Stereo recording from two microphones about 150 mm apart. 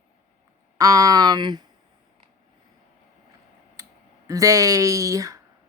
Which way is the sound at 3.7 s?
20° right (ahead or behind).